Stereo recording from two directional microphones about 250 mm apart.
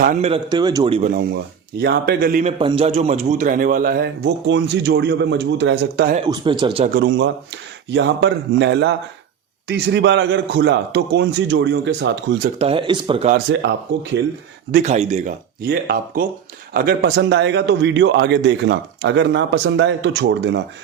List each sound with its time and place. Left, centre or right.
0.0 s a man's voice: right
1.1 s a man's voice: right
2.4 s a man's voice: right
6.1 s a man's voice: centre
6.9 s a man's voice: right
12.5 s a man's voice: right
13.3 s a man's voice: right
14.7 s a man's voice: right